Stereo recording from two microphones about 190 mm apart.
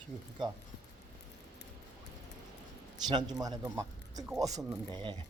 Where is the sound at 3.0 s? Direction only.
20° right (ahead or behind).